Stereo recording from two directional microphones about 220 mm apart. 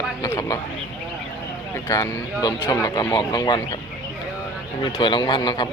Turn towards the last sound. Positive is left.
turn(degrees=20)  # may be behind; listen again after turning